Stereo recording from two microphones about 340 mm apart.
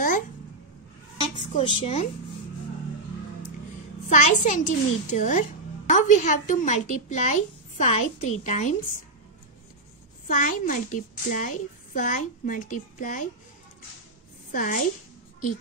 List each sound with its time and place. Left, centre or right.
1.3 s a woman's voice: centre
4.1 s a child's voice: left
10.2 s a child's voice: left
14.5 s a child's voice: left